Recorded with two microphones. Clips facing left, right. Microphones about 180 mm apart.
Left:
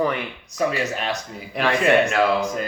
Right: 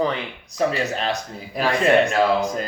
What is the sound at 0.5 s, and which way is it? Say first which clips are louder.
Speech: right 1 dB; 35° right (ahead or behind).